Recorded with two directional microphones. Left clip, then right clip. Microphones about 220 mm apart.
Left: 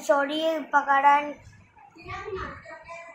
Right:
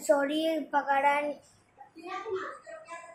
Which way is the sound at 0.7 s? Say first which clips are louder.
Left 7 dB; centre (ahead or behind).